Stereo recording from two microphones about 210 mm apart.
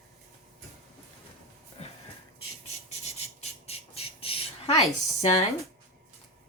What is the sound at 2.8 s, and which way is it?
Squawk, 30° left (ahead or behind).